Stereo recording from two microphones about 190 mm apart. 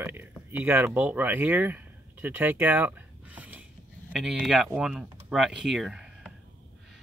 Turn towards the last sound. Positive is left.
turn(degrees=0)  # may be behind; listen again after turning